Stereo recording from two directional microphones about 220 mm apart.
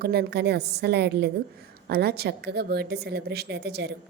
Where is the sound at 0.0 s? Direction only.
45° right (ahead or behind).